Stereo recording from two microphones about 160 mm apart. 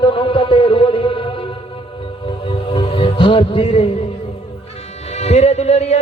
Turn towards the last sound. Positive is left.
turn(degrees=40)  # may be behind; listen again after turning